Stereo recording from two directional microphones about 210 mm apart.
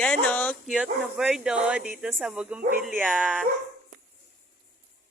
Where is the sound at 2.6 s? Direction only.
40° right (ahead or behind).